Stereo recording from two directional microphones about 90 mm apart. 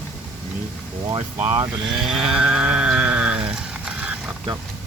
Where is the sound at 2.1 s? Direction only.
5° right (ahead or behind).